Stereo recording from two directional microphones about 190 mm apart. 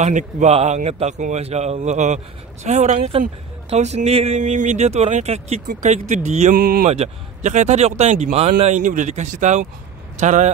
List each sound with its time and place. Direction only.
0.0 s speech: 40° right (ahead or behind)
6.5 s speech: 50° right (ahead or behind)
6.9 s speech: 35° right (ahead or behind)